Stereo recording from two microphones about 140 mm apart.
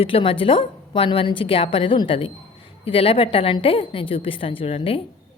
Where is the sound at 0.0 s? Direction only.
40° left (ahead or behind).